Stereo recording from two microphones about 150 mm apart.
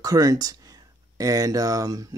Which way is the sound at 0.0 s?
25° right (ahead or behind).